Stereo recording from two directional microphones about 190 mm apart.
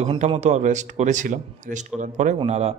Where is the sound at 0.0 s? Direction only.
30° right (ahead or behind).